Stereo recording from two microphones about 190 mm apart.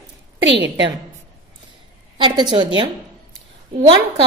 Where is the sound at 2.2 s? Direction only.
25° right (ahead or behind).